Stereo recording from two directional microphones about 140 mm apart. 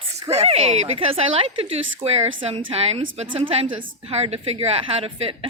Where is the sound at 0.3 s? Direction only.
50° right (ahead or behind).